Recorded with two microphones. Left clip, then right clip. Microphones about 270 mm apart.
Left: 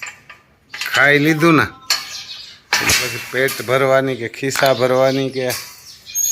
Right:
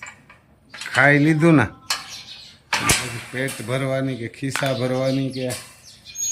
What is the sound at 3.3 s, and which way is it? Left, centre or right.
Speech, centre.